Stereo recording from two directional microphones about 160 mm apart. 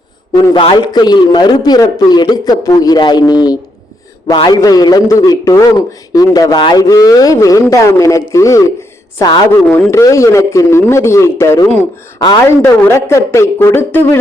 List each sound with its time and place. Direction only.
0.5 s a man's voice: 30° left (ahead or behind)
9.5 s a man's voice: 10° left (ahead or behind)
9.9 s a man's voice: 20° left (ahead or behind)